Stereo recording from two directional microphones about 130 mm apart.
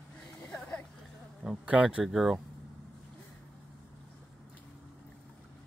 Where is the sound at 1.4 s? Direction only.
5° right (ahead or behind).